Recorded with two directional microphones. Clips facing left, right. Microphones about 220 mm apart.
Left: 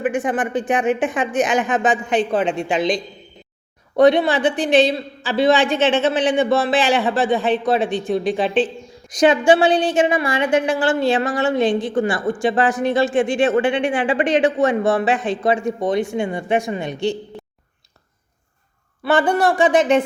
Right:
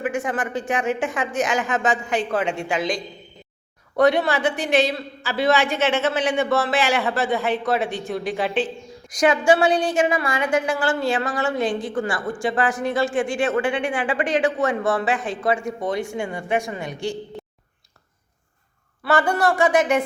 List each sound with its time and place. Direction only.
0.0 s a man's voice: 15° left (ahead or behind)
19.0 s a man's voice: 15° left (ahead or behind)